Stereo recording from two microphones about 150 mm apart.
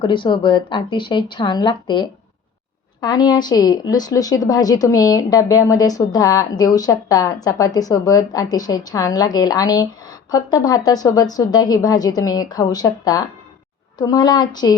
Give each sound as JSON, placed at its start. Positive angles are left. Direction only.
{"t": 0.0, "sound": "a woman's voice", "side_deg": 35}